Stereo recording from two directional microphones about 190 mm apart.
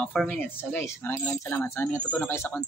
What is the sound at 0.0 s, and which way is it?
Speech, 5° left (ahead or behind).